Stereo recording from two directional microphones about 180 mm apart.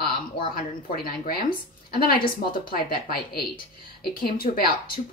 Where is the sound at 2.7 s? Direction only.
55° left (ahead or behind).